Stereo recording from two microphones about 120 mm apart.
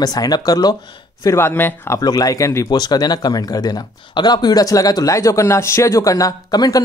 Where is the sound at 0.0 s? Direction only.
30° left (ahead or behind).